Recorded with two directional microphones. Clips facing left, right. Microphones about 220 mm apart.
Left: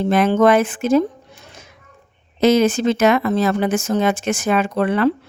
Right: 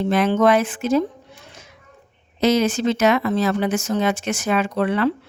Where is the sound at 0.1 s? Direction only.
50° left (ahead or behind).